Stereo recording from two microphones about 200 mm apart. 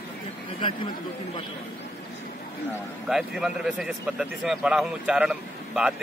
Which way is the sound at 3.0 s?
Centre (ahead or behind).